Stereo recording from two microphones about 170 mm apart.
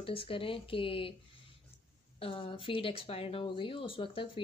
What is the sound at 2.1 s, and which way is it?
Speech, 35° left (ahead or behind).